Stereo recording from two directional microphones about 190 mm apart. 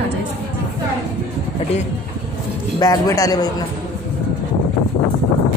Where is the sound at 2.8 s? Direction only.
20° left (ahead or behind).